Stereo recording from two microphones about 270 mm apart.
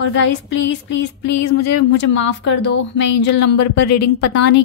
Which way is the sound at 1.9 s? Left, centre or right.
Left.